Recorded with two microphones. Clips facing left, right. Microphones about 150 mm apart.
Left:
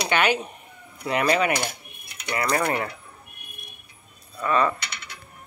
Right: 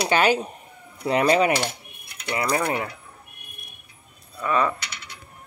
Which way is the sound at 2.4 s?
10° right (ahead or behind).